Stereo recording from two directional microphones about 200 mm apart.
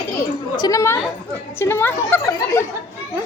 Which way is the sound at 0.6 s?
15° left (ahead or behind).